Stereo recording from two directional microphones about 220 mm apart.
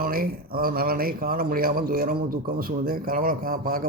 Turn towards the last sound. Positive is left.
turn(degrees=-40)  # may be behind; listen again after turning